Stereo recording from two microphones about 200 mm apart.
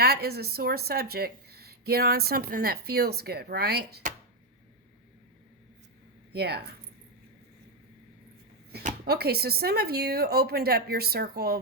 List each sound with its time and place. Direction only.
0.0 s speech: 50° right (ahead or behind)
6.3 s speech: 55° right (ahead or behind)
8.7 s speech: 45° right (ahead or behind)